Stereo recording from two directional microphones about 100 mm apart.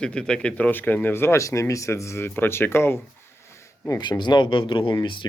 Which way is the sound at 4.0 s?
45° left (ahead or behind).